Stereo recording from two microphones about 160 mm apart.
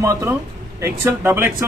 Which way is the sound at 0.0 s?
20° right (ahead or behind).